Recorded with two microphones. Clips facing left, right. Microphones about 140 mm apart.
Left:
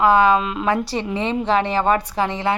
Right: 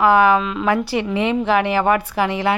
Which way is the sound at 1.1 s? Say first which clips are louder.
Right 2 dB; 25° left (ahead or behind).